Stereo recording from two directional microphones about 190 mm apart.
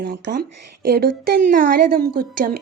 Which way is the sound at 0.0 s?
60° right (ahead or behind).